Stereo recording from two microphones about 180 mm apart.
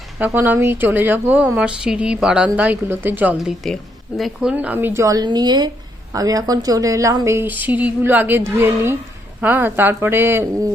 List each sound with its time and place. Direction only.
0.2 s a woman's voice: 10° right (ahead or behind)
3.3 s a woman's voice: centre (ahead or behind)